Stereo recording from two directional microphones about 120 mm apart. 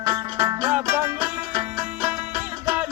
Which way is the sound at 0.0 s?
35° right (ahead or behind).